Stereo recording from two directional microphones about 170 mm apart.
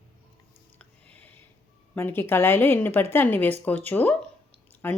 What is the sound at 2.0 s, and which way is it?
Speech, 15° left (ahead or behind).